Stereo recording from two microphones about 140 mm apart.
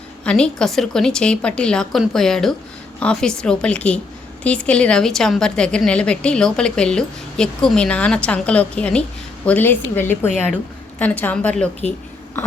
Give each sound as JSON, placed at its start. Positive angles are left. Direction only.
{"t": 0.3, "sound": "a woman's voice", "side_deg": 5}